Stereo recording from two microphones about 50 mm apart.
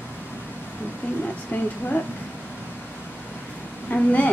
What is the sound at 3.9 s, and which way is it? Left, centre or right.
Speech, left.